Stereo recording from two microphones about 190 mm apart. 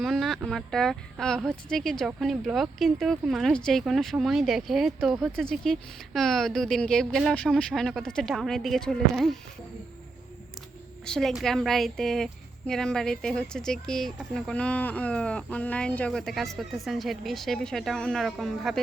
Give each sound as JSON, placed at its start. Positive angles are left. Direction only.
{"t": 0.0, "sound": "a woman's voice", "side_deg": 0}
{"t": 11.0, "sound": "a woman's voice", "side_deg": 5}